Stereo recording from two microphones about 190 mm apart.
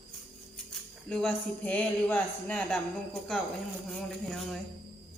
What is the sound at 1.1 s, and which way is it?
Speech, 5° left (ahead or behind).